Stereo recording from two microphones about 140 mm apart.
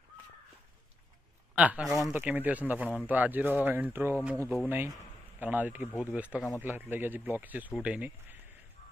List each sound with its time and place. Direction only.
1.5 s speech: 10° right (ahead or behind)